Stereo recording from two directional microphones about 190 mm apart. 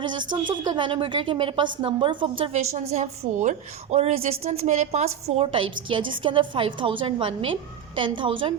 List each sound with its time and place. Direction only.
0.0 s a woman's voice: 25° right (ahead or behind)